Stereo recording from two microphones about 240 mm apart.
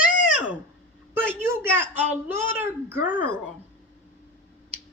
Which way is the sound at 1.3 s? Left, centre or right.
Centre.